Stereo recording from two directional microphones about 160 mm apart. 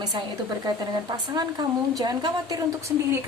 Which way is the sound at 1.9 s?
25° right (ahead or behind).